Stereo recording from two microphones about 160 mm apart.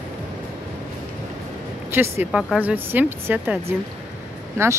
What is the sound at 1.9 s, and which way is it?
Speech, 15° right (ahead or behind).